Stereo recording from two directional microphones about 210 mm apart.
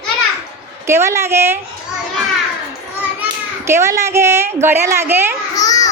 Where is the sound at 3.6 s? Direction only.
10° right (ahead or behind).